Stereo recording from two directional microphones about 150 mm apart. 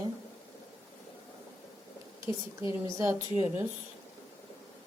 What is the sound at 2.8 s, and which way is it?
Speech, 20° right (ahead or behind).